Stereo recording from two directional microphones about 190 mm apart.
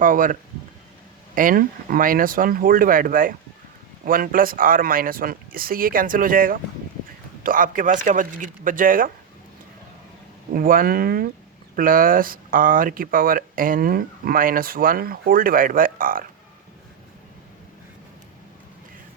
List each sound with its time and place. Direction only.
0.0 s speech: 45° right (ahead or behind)
1.4 s speech: 50° right (ahead or behind)
10.5 s speech: 50° right (ahead or behind)